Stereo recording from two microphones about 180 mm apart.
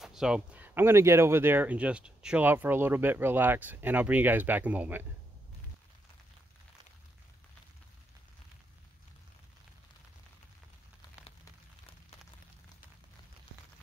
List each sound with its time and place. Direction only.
0.0 s speech: centre (ahead or behind)